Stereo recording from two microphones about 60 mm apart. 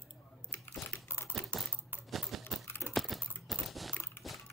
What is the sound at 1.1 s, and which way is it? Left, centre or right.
Typing, right.